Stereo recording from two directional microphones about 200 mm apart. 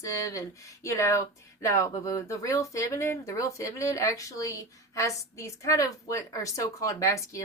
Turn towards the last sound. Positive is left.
turn(degrees=15)  # may be behind; listen again after turning